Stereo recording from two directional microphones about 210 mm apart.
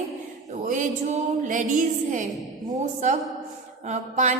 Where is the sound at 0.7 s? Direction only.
35° right (ahead or behind).